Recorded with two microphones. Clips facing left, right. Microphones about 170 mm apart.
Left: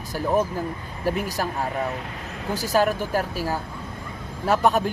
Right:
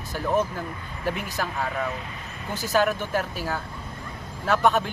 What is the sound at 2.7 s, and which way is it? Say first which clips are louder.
Speech: left 1 dB; 40° left (ahead or behind).